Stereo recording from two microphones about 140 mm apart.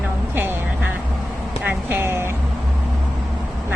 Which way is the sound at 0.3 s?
15° right (ahead or behind).